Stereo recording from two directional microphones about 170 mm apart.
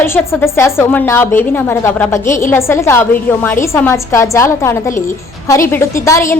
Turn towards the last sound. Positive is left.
turn(degrees=15)  # may be behind; listen again after turning